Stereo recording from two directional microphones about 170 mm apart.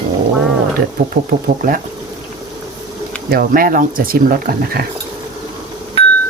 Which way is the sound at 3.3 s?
55° right (ahead or behind).